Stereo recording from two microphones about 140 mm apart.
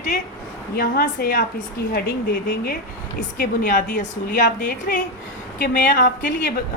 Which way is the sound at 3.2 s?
90° left.